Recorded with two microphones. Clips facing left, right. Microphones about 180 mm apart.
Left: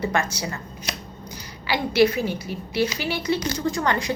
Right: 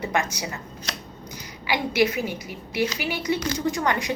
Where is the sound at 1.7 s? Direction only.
15° right (ahead or behind).